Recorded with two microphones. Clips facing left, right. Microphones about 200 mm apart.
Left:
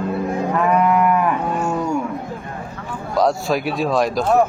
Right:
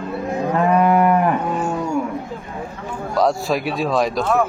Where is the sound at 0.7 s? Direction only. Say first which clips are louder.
Right 2 dB; 35° right (ahead or behind).